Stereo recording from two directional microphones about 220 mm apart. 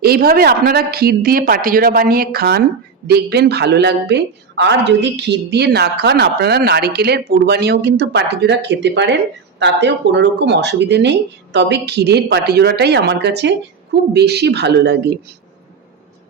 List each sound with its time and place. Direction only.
0.0 s a woman's voice: 45° right (ahead or behind)